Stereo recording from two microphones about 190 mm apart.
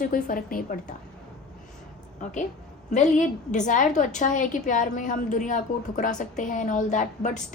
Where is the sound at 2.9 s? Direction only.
40° left (ahead or behind).